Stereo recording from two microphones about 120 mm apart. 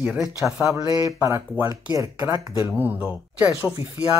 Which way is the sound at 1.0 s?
25° right (ahead or behind).